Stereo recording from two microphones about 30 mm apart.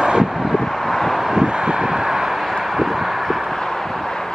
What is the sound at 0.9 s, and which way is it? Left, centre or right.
Vehicle, centre.